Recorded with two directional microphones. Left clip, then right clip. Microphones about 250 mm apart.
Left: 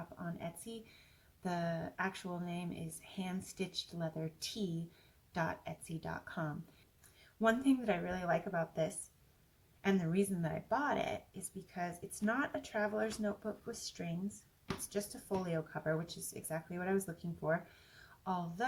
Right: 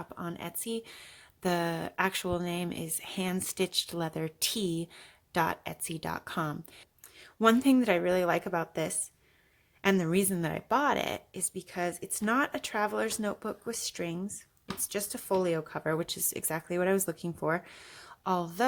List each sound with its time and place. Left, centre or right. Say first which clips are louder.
0.2 s speech: right 7 dB; right
18.2 s a woman's voice: right 9 dB; right